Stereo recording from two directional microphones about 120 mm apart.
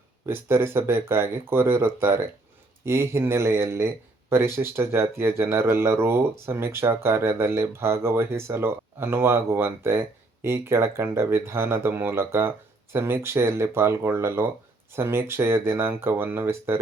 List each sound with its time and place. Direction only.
0.3 s speech: 20° right (ahead or behind)